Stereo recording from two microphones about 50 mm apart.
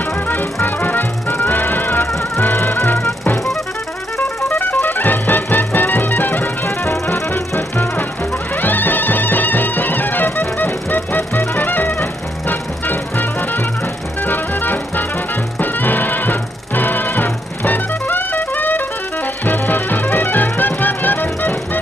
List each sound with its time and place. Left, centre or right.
0.3 s music: left
4.8 s music: left
6.8 s music: left
8.5 s music: left